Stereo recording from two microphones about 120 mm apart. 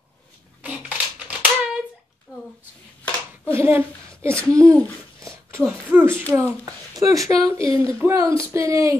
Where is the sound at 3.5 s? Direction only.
20° right (ahead or behind).